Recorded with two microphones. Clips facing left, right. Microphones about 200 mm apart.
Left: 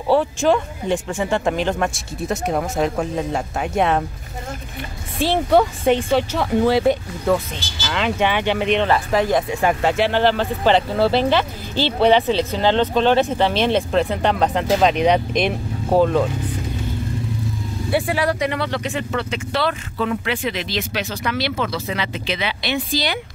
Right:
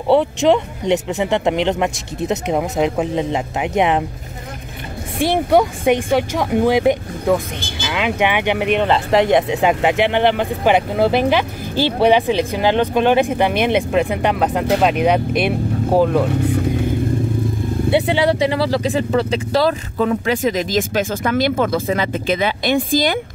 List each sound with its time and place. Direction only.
0.1 s speech: 20° right (ahead or behind)
5.2 s speech: 15° right (ahead or behind)
17.9 s speech: 25° right (ahead or behind); by 23.1 s 50° right (ahead or behind)